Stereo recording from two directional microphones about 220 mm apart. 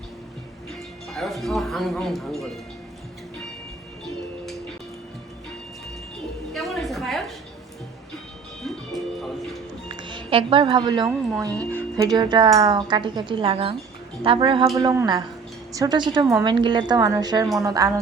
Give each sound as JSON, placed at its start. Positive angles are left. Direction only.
{"t": 1.1, "sound": "speech", "side_deg": 0}
{"t": 6.5, "sound": "a sound", "side_deg": 0}
{"t": 8.6, "sound": "music", "side_deg": 0}
{"t": 9.9, "sound": "a woman's voice", "side_deg": -20}